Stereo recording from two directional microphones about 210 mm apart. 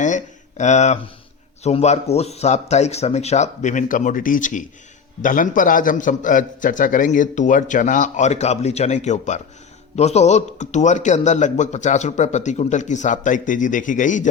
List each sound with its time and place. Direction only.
0.0 s a man's voice: 35° left (ahead or behind)